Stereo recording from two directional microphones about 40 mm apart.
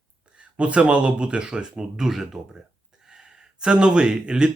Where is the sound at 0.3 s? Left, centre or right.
Right.